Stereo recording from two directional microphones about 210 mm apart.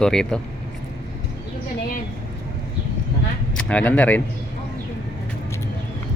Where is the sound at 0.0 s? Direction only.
5° left (ahead or behind).